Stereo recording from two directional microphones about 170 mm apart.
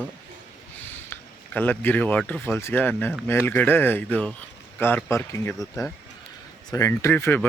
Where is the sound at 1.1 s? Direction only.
10° left (ahead or behind).